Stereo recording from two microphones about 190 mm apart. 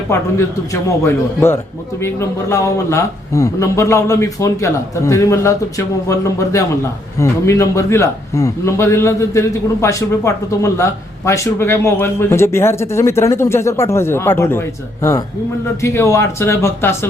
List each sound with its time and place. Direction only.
0.1 s a man's voice: 15° left (ahead or behind)